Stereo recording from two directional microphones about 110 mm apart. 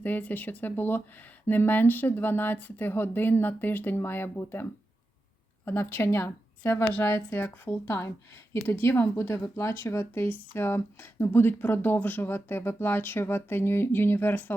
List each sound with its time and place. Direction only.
0.0 s speech: 15° left (ahead or behind)